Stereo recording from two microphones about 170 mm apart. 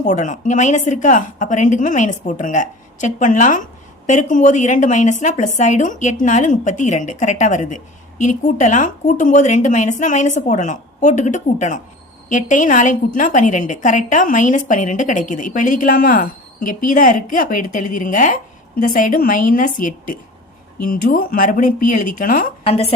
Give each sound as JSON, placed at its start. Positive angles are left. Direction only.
{"t": 0.0, "sound": "a woman's voice", "side_deg": 45}
{"t": 22.6, "sound": "a woman's voice", "side_deg": 35}